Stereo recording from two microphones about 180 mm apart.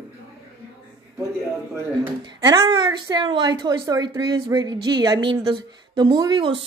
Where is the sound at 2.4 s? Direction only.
25° right (ahead or behind).